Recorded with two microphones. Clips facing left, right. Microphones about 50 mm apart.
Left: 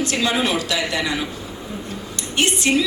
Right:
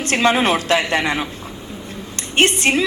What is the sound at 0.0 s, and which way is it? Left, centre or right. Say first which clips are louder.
A woman's voice: right 4 dB; right.